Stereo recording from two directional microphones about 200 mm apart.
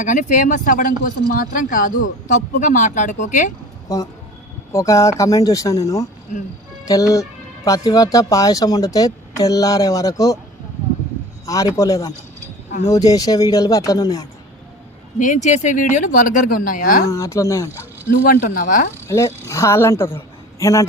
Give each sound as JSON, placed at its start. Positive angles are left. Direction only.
{"t": 0.0, "sound": "speech", "side_deg": 40}
{"t": 3.8, "sound": "speech", "side_deg": 15}
{"t": 11.4, "sound": "speech", "side_deg": 15}
{"t": 15.2, "sound": "speech", "side_deg": 40}
{"t": 17.1, "sound": "speech", "side_deg": 15}
{"t": 18.2, "sound": "speech", "side_deg": 50}
{"t": 19.0, "sound": "speech", "side_deg": 15}